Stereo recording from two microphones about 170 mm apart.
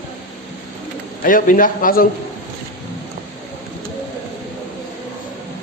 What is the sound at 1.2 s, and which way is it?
Speech, 55° left (ahead or behind).